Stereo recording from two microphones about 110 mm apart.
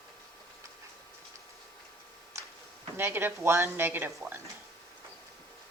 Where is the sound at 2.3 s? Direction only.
25° right (ahead or behind).